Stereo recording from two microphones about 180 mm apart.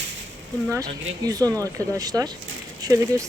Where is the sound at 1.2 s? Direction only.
20° right (ahead or behind).